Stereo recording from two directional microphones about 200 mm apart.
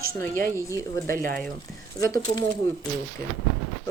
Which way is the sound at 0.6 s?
15° left (ahead or behind).